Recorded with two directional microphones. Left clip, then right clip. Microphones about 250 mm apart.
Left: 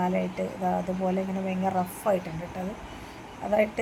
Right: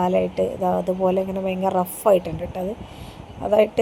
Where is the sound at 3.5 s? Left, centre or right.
Right.